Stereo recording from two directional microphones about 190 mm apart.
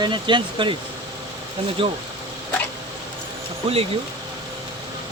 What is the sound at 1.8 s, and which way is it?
Speech, 25° right (ahead or behind).